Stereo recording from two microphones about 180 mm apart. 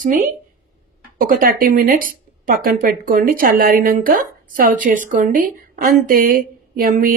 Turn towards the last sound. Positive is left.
turn(degrees=-50)  # may be behind; listen again after turning